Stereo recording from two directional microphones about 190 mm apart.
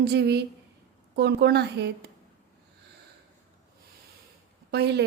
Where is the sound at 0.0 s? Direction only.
60° right (ahead or behind).